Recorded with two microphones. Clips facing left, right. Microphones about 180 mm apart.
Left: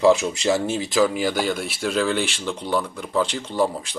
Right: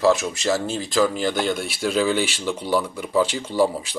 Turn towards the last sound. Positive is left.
turn(degrees=-5)  # may be behind; listen again after turning